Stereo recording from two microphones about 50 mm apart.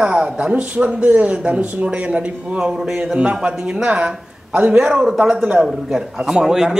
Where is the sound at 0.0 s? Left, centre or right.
Right.